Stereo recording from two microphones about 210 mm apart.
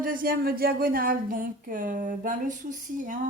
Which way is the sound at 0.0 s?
40° right (ahead or behind).